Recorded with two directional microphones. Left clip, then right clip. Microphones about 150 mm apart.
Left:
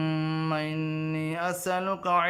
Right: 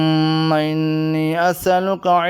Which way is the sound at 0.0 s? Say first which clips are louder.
Right 13 dB; 40° right (ahead or behind).